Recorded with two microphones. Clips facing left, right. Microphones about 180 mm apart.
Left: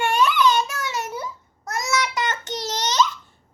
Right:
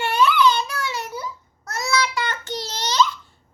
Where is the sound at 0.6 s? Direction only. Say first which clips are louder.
Left 1 dB; 45° left (ahead or behind).